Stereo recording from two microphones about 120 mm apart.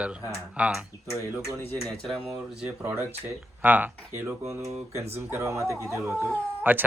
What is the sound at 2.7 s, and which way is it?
Speech, 20° right (ahead or behind).